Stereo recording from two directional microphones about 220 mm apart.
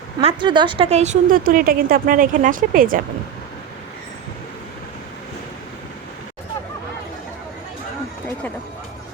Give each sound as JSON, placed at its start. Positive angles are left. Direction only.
{"t": 0.2, "sound": "a woman's voice", "side_deg": -25}